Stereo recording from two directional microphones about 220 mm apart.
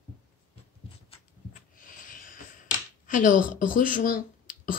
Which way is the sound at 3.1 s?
35° left (ahead or behind).